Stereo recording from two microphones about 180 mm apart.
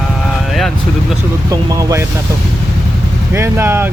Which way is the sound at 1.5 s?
20° right (ahead or behind).